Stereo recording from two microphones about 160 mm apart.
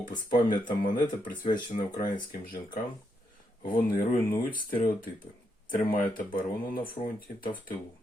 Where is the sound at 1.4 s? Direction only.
30° left (ahead or behind).